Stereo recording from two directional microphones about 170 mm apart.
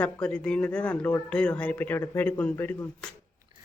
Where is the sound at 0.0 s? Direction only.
10° left (ahead or behind).